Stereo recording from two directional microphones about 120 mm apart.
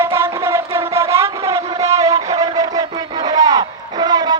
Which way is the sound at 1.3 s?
25° right (ahead or behind).